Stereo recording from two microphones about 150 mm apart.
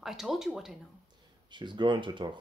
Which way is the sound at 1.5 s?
30° right (ahead or behind).